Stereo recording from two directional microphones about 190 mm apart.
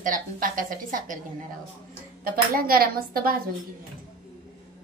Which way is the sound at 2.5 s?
50° right (ahead or behind).